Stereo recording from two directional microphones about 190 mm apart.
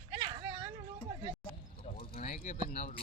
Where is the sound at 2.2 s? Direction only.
40° left (ahead or behind).